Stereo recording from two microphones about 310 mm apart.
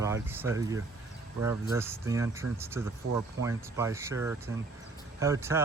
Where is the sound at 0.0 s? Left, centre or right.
Centre.